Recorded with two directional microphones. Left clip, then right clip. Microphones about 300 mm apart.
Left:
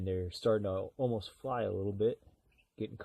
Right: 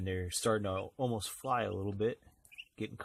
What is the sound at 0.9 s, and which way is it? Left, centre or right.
Speech, right.